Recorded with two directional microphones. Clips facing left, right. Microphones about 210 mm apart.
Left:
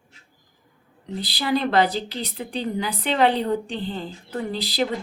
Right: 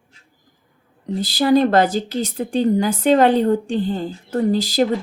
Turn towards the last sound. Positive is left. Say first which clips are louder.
# right 8 dB
turn(degrees=-45)  # may be behind; listen again after turning